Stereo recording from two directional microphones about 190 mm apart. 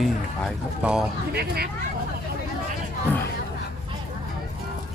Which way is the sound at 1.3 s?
55° right (ahead or behind).